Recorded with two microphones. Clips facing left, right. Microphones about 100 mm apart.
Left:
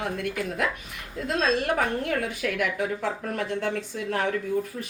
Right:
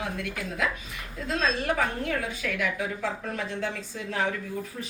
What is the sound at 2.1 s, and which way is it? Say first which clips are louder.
Speech: left 3 dB; 55° left (ahead or behind).